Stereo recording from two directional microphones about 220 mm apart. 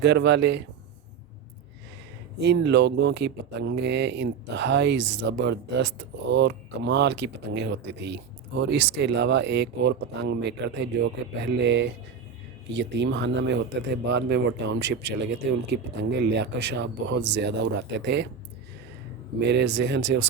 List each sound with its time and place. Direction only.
0.0 s speech: 50° right (ahead or behind)
2.4 s speech: 50° right (ahead or behind)
11.3 s speech: 55° right (ahead or behind)
19.4 s speech: 50° right (ahead or behind)